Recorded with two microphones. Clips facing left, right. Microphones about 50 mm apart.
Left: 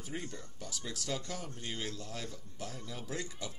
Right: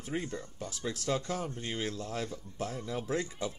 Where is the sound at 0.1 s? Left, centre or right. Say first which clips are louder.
Right 7 dB; right.